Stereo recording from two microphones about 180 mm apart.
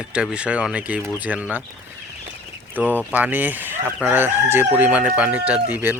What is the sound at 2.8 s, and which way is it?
Chicken, 10° right (ahead or behind).